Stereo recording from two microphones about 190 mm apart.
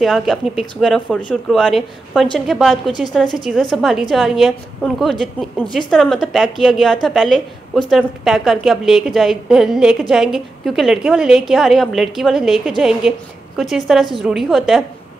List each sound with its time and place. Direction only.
0.0 s a woman's voice: centre (ahead or behind)